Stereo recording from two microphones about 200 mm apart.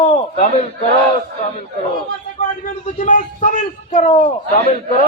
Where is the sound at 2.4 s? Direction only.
40° left (ahead or behind).